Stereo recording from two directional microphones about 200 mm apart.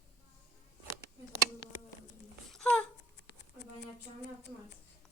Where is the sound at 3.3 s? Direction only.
60° left (ahead or behind).